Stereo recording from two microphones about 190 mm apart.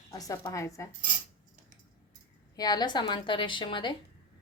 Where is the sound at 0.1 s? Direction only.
15° left (ahead or behind).